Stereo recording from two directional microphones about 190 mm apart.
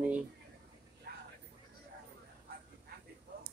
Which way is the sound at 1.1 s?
60° right (ahead or behind).